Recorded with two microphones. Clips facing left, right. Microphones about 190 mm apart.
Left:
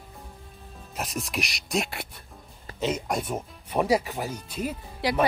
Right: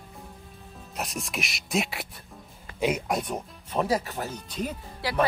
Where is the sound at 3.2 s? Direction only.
5° left (ahead or behind).